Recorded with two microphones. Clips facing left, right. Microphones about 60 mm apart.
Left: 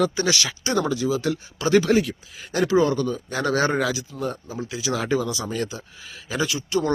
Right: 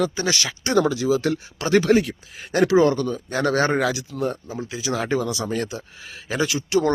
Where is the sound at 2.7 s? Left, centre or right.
Right.